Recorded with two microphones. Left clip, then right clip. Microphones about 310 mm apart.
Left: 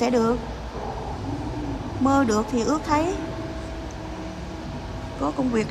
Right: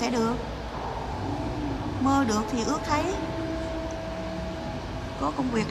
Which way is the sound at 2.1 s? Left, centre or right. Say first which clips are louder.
Left 4 dB; centre.